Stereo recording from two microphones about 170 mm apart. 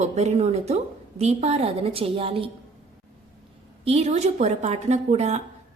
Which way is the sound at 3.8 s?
35° right (ahead or behind).